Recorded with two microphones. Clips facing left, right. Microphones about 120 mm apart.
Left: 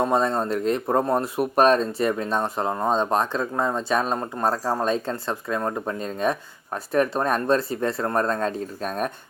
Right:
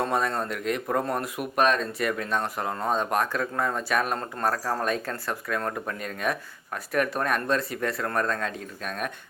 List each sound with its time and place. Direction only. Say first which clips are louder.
0.0 s speech: left 5 dB; 25° left (ahead or behind)